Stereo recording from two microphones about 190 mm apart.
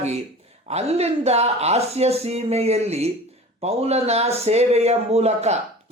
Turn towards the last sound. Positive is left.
turn(degrees=-35)  # may be behind; listen again after turning